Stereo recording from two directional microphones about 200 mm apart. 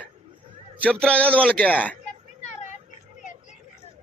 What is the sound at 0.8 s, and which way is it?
A man's voice, 5° left (ahead or behind).